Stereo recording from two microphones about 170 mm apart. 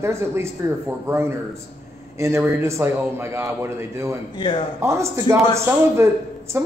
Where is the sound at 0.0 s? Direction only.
15° right (ahead or behind).